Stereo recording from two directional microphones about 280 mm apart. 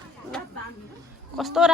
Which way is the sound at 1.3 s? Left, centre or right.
Centre.